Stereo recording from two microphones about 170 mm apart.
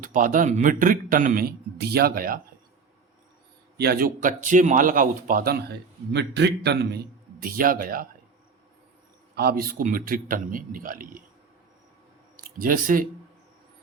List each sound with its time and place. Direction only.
0.0 s speech: 50° right (ahead or behind)
3.8 s speech: 60° right (ahead or behind)
6.1 s a man's voice: 90° right; by 8.0 s 55° right (ahead or behind)
9.3 s a man's voice: 65° right (ahead or behind)
12.4 s speech: 55° right (ahead or behind)